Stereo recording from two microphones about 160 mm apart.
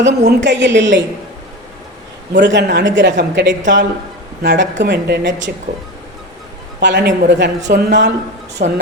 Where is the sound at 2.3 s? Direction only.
90° right.